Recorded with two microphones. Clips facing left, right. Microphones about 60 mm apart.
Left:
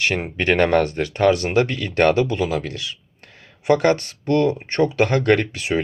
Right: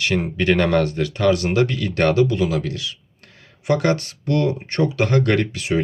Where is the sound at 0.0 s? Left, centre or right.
Left.